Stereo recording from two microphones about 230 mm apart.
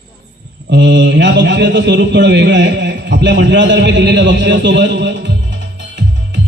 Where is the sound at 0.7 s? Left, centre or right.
Right.